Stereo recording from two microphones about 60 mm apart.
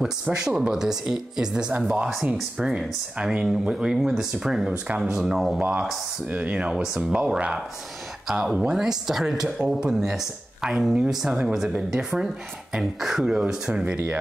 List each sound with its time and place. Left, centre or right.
0.0 s speech: centre
5.6 s speech: right